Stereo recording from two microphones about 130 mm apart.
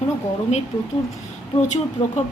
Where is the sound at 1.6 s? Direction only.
65° left (ahead or behind).